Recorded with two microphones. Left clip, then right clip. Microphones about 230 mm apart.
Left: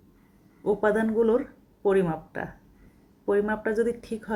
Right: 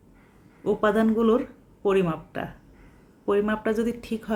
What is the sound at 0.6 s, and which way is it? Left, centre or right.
Speech, centre.